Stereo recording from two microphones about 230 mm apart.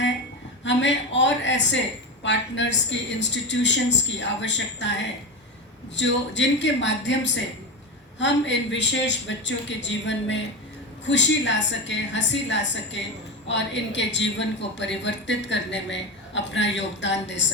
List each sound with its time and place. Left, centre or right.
0.6 s a woman's voice: left
6.0 s a woman's voice: left